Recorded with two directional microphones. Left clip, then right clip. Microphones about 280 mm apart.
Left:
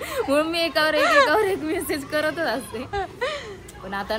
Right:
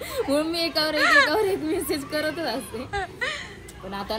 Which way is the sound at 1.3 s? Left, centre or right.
Centre.